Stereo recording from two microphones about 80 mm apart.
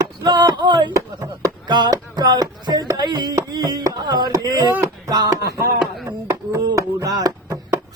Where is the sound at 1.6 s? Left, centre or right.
Right.